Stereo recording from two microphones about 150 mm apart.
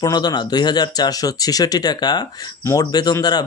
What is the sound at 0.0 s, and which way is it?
Speech, 25° left (ahead or behind).